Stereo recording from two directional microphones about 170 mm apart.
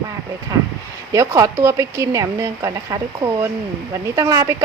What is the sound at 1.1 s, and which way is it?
A woman's voice, 20° right (ahead or behind).